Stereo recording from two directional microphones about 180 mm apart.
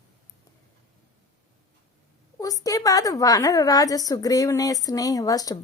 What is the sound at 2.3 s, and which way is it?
A woman's voice, 20° left (ahead or behind).